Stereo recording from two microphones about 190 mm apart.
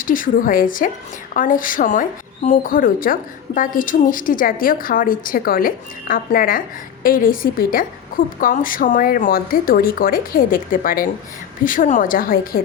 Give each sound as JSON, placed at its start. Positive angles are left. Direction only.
{"t": 0.0, "sound": "speech", "side_deg": 45}